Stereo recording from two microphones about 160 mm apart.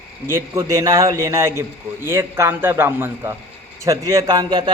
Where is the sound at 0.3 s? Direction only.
20° right (ahead or behind).